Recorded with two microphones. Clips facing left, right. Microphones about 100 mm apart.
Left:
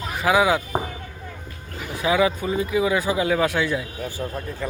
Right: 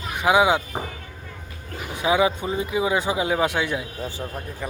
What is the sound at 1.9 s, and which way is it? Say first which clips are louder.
Speech: even; 20° right (ahead or behind).